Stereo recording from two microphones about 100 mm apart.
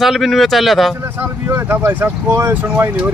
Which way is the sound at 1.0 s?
20° right (ahead or behind).